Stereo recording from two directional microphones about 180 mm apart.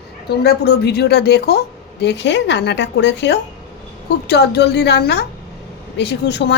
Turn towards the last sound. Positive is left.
turn(degrees=70)  # may be behind; listen again after turning